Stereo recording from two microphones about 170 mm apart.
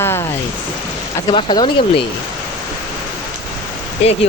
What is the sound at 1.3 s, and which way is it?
Speech, 30° left (ahead or behind).